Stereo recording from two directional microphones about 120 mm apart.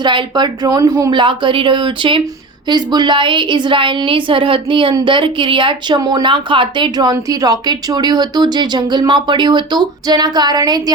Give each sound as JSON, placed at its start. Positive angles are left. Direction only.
{"t": 0.0, "sound": "a woman's voice", "side_deg": -40}
{"t": 6.0, "sound": "speech", "side_deg": -35}